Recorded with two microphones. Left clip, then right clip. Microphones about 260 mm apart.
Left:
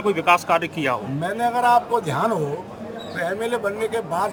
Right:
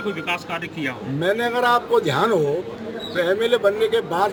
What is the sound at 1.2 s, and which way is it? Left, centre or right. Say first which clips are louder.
Speech: right 4 dB; centre.